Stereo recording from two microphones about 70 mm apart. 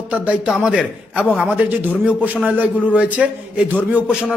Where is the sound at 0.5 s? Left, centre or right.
Centre.